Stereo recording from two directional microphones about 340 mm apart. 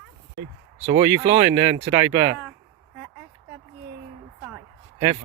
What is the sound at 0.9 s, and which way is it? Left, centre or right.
Speech, centre.